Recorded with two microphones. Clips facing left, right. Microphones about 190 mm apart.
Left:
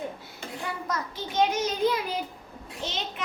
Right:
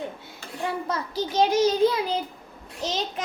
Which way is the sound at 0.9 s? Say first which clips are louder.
Right 5 dB; 35° right (ahead or behind).